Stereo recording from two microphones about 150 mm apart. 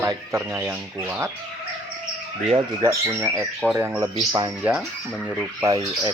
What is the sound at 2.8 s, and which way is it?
Speech, 15° right (ahead or behind).